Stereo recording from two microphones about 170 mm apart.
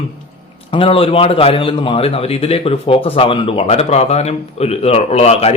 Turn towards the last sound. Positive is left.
turn(degrees=40)  # may be behind; listen again after turning